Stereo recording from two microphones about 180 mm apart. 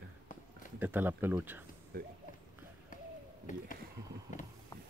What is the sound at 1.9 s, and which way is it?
Speech, 60° right (ahead or behind).